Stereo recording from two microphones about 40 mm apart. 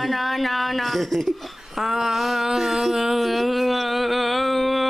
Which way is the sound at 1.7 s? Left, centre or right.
Centre.